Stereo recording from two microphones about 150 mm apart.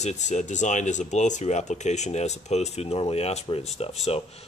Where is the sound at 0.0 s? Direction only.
50° left (ahead or behind).